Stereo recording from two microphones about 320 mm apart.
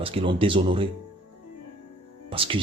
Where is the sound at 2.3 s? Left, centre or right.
Centre.